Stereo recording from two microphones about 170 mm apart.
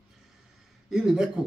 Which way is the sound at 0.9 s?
5° right (ahead or behind).